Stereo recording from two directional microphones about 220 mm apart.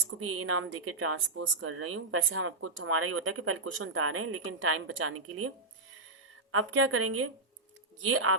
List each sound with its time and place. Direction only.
0.2 s a woman's voice: 75° right (ahead or behind)
6.5 s a woman's voice: 75° right (ahead or behind)